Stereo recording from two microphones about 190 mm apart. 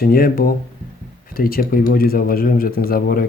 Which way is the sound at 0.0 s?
50° left (ahead or behind).